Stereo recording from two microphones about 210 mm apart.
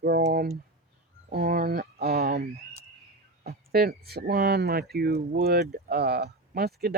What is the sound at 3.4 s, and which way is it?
Speech, 50° right (ahead or behind).